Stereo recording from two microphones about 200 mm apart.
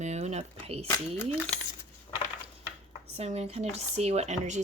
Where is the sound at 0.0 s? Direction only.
35° right (ahead or behind).